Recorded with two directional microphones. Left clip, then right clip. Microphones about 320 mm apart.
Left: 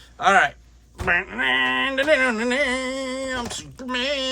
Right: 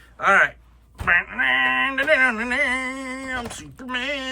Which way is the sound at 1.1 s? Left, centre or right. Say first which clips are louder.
Right 2 dB; centre.